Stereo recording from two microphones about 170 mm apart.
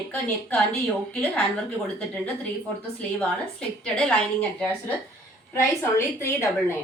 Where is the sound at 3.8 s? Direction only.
5° left (ahead or behind).